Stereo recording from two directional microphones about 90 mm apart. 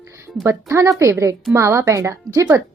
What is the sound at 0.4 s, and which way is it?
A woman's voice, 30° right (ahead or behind).